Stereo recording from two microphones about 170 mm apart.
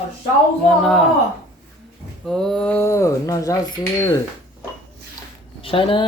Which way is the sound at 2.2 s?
5° left (ahead or behind).